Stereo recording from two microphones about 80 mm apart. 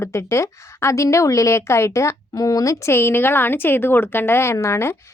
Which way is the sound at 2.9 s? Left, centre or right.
Left.